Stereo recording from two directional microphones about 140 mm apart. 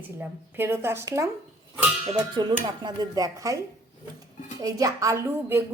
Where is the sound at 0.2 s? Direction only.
15° right (ahead or behind).